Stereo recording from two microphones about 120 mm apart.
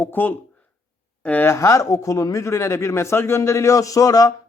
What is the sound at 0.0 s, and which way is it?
Speech, 15° left (ahead or behind).